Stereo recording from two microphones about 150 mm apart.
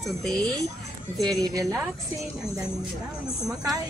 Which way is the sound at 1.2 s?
25° right (ahead or behind).